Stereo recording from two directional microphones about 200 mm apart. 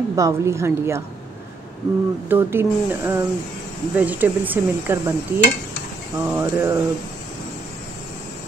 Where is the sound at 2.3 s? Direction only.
10° right (ahead or behind).